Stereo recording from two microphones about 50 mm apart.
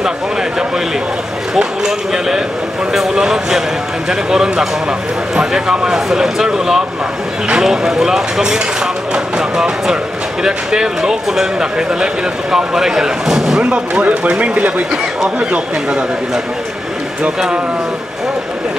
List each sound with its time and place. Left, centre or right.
1.6 s speech: centre
13.6 s speech: right